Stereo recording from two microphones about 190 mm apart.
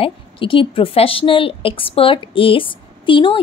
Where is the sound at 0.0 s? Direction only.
30° left (ahead or behind).